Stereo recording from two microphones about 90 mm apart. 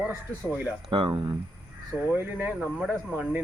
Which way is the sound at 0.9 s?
60° right (ahead or behind).